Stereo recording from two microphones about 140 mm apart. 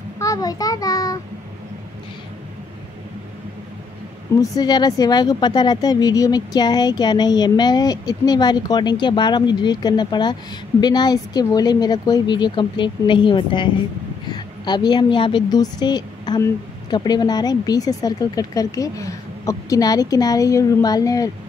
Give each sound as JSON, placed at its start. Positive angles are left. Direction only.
{"t": 0.2, "sound": "a child's voice", "side_deg": 25}
{"t": 4.4, "sound": "a woman's voice", "side_deg": 30}